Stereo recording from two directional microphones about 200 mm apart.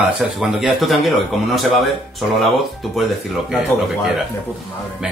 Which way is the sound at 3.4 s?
Centre (ahead or behind).